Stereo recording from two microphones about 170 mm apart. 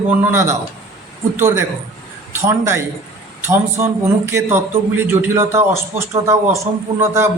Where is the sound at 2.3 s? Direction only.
15° right (ahead or behind).